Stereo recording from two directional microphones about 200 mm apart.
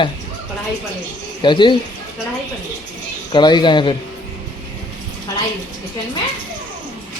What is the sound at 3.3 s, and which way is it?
Speech, 20° left (ahead or behind).